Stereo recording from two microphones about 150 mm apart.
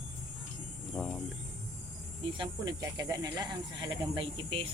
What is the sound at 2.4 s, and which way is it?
Speech, 25° right (ahead or behind).